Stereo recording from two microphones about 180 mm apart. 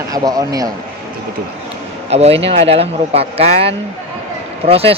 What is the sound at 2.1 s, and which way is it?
Speech, 35° right (ahead or behind).